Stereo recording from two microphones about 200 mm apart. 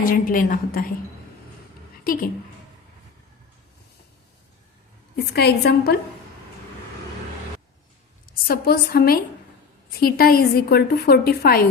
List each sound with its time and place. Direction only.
0.0 s a woman's voice: 45° left (ahead or behind)
2.1 s a woman's voice: 45° left (ahead or behind)
5.1 s a woman's voice: 55° left (ahead or behind)
8.4 s a woman's voice: 50° left (ahead or behind)